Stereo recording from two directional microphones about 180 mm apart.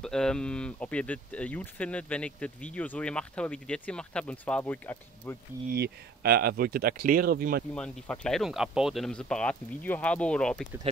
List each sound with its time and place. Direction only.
0.0 s speech: 5° left (ahead or behind)
5.7 s speech: 60° right (ahead or behind)
7.7 s speech: 5° left (ahead or behind)